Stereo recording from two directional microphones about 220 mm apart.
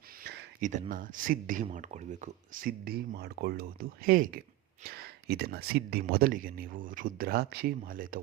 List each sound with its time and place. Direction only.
0.6 s speech: 35° right (ahead or behind)